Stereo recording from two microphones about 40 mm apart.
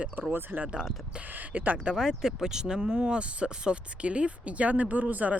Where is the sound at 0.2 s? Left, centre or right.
Right.